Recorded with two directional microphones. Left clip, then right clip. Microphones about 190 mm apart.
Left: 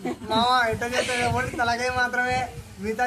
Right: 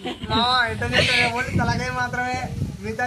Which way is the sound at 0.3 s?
70° left (ahead or behind).